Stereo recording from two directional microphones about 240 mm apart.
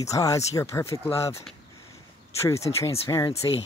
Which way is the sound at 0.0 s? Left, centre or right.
Centre.